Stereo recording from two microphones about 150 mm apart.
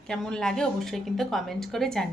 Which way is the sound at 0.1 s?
5° left (ahead or behind).